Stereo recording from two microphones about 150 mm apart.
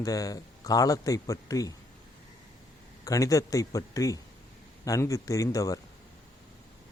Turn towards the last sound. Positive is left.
turn(degrees=20)  # may be behind; listen again after turning